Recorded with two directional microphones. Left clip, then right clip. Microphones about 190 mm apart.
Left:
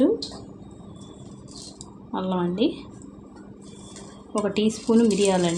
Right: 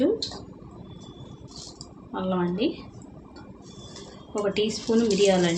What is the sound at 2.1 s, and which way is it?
Speech, 35° left (ahead or behind).